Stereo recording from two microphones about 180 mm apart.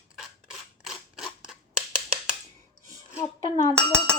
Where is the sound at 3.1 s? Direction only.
15° left (ahead or behind).